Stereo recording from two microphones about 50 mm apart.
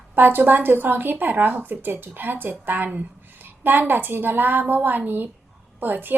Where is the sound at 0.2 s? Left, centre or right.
Right.